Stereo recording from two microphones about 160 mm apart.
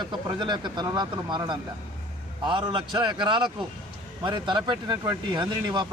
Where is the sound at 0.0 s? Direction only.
30° right (ahead or behind).